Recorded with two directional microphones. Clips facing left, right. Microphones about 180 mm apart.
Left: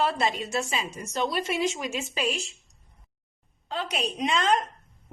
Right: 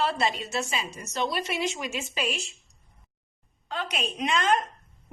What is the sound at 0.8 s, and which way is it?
A woman's voice, 45° left (ahead or behind).